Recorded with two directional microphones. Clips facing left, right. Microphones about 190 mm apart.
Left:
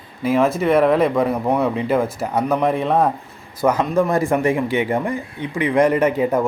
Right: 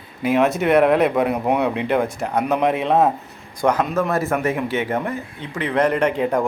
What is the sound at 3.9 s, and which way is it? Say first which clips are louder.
Speech: left 3 dB; 15° left (ahead or behind).